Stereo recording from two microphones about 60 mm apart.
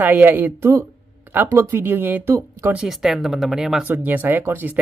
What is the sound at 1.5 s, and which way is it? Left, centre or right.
Speech, right.